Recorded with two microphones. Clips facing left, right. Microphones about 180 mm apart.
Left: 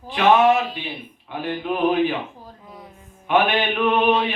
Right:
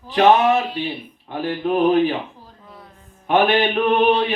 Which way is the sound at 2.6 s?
15° left (ahead or behind).